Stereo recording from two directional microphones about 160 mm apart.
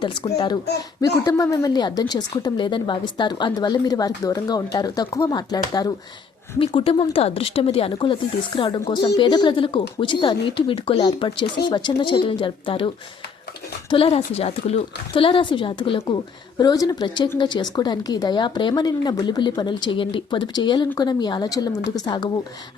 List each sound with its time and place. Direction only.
0.0 s a woman's voice: 30° left (ahead or behind)
6.6 s a woman's voice: 35° left (ahead or behind)
13.9 s a woman's voice: 35° left (ahead or behind)